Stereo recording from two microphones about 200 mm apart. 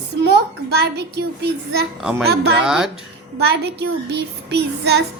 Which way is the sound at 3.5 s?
55° right (ahead or behind).